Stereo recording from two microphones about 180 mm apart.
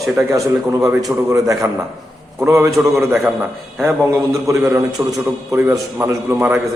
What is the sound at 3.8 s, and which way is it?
A man's voice, 15° right (ahead or behind).